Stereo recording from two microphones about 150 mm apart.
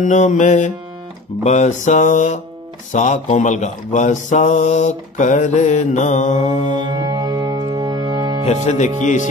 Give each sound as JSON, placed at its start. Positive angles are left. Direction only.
{"t": 0.0, "sound": "speech", "side_deg": 55}
{"t": 1.4, "sound": "a sound", "side_deg": 50}
{"t": 6.8, "sound": "music", "side_deg": -30}
{"t": 8.6, "sound": "speech", "side_deg": 55}